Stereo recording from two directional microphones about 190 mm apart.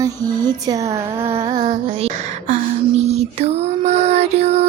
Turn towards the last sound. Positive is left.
turn(degrees=-35)  # may be behind; listen again after turning